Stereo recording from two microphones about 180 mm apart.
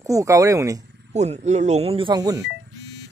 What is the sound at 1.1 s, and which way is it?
Speech, 40° right (ahead or behind).